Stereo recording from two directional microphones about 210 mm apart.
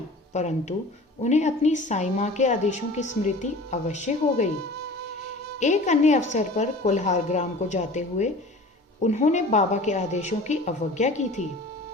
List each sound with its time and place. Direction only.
0.3 s a woman's voice: 35° left (ahead or behind)
5.5 s a woman's voice: 35° left (ahead or behind)